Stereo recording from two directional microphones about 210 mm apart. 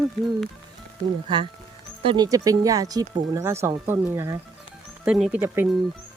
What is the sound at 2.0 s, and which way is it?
Speech, 20° right (ahead or behind).